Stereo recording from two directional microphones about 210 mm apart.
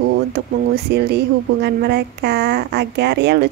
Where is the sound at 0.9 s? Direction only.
50° right (ahead or behind).